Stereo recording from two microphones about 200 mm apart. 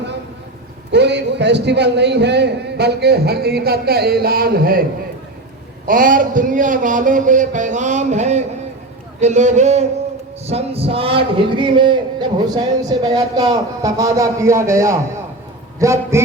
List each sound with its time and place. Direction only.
0.9 s a man's voice: 60° right (ahead or behind); by 16.2 s 15° right (ahead or behind)